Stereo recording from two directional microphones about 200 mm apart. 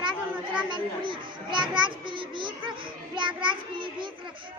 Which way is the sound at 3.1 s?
25° right (ahead or behind).